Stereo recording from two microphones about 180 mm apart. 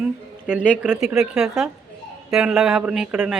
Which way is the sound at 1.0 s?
Centre (ahead or behind).